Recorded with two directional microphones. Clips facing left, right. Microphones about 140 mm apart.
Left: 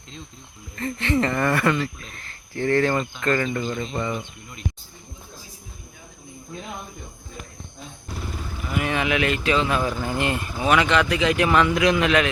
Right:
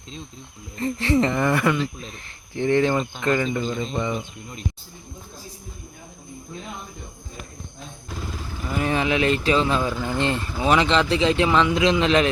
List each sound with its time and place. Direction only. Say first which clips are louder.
0.8 s a man's voice: right 2 dB; 30° right (ahead or behind)
1.3 s speech: even; 10° right (ahead or behind)
3.6 s speech: right 1 dB; 5° left (ahead or behind)
8.7 s speech: right 1 dB; 30° right (ahead or behind)
9.9 s speech: right 1 dB; 15° left (ahead or behind)
10.2 s a man's voice: right 1 dB; 25° right (ahead or behind)